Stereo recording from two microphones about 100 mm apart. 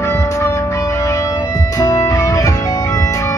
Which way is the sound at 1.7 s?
40° left (ahead or behind).